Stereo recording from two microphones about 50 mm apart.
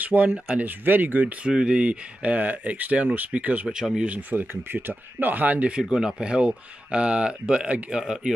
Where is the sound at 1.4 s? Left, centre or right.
Centre.